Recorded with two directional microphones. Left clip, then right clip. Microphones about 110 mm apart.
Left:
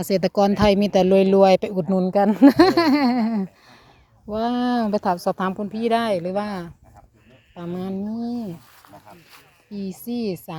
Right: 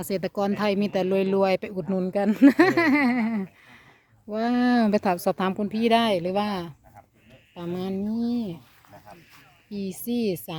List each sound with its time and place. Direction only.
0.2 s speech: 45° left (ahead or behind)
1.9 s speech: 10° left (ahead or behind)
2.5 s a sound: 30° left (ahead or behind)
4.3 s speech: 5° right (ahead or behind)
9.6 s speech: 15° right (ahead or behind)